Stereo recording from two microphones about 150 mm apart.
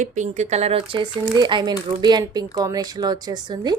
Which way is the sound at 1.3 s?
30° right (ahead or behind).